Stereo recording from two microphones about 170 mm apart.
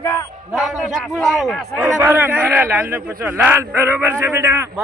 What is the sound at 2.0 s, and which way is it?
A man's voice, 15° right (ahead or behind).